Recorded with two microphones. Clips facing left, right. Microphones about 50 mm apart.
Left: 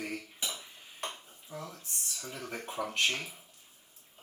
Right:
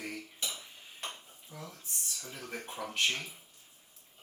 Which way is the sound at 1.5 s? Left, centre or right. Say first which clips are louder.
Left 5 dB; left.